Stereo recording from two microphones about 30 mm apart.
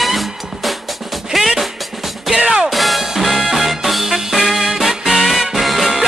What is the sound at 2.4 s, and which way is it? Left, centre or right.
Music, right.